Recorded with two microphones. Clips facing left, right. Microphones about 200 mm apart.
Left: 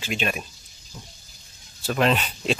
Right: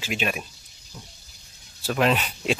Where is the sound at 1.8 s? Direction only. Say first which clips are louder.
Even; 5° right (ahead or behind).